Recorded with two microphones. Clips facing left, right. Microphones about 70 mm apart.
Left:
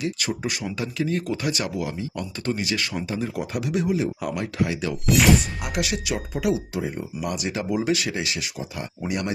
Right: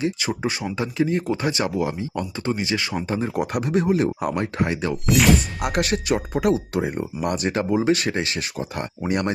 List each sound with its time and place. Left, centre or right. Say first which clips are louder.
0.0 s speech: right 3 dB; right
3.1 s speech: right 4 dB; right
4.2 s speech: right 3 dB; right
5.0 s speech: even; centre
5.6 s speech: right 5 dB; right